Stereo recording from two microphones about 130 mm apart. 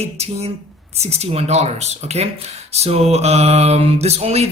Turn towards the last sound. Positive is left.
turn(degrees=-55)  # may be behind; listen again after turning